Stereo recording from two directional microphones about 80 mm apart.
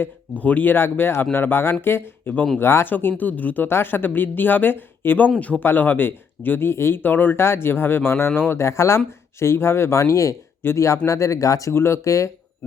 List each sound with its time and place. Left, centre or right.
0.0 s speech: centre
2.6 s speech: left